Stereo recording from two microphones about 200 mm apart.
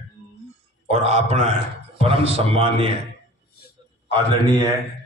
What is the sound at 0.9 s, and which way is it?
A man's voice, 30° right (ahead or behind).